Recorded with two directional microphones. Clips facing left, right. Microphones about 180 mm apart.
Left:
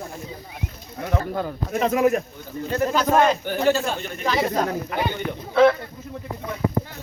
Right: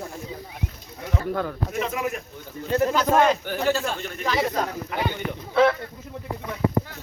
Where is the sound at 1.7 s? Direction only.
40° left (ahead or behind).